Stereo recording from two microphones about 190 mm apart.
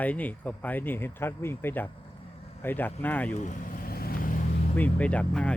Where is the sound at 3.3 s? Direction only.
40° left (ahead or behind).